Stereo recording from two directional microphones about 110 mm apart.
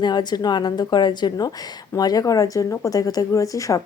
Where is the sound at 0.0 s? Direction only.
40° left (ahead or behind).